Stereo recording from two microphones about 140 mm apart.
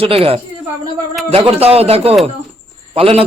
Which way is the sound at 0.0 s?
45° right (ahead or behind).